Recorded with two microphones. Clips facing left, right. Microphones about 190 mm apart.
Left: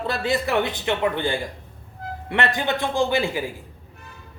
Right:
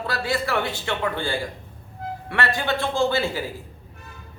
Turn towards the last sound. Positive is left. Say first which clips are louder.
# left 1 dB
turn(degrees=15)  # may be behind; listen again after turning